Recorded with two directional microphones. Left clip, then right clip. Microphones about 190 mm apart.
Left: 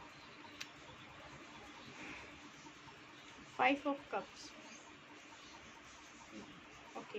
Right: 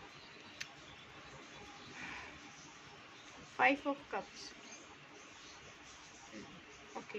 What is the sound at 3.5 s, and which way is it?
Speech, 15° right (ahead or behind).